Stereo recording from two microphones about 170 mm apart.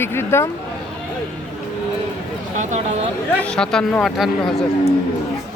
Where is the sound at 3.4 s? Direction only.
5° left (ahead or behind).